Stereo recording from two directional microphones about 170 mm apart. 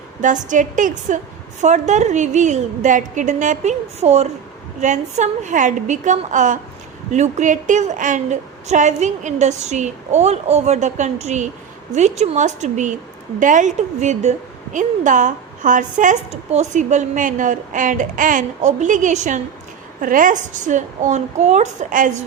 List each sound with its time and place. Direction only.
0.2 s a woman's voice: 50° right (ahead or behind)